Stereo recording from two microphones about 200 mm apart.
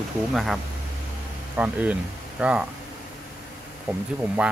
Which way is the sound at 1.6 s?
5° right (ahead or behind).